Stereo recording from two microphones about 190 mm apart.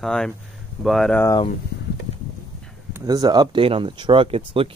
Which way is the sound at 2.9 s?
20° right (ahead or behind).